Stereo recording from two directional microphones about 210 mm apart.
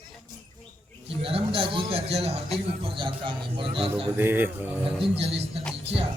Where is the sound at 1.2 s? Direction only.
25° right (ahead or behind).